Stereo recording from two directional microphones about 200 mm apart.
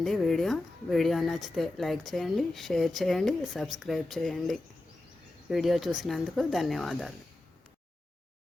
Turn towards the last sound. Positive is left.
turn(degrees=0)  # may be behind; listen again after turning